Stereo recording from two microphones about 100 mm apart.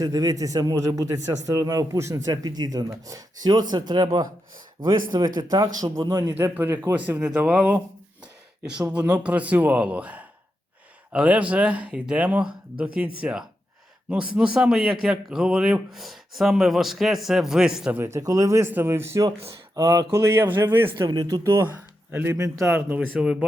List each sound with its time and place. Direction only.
0.0 s speech: 35° right (ahead or behind)
5.8 s speech: 35° right (ahead or behind)
6.3 s speech: 20° right (ahead or behind)
8.9 s speech: 10° right (ahead or behind)
17.9 s speech: 30° right (ahead or behind)
21.1 s speech: 40° right (ahead or behind)
21.4 s speech: 25° right (ahead or behind)
22.3 s speech: 35° right (ahead or behind)
23.2 s speech: 10° right (ahead or behind)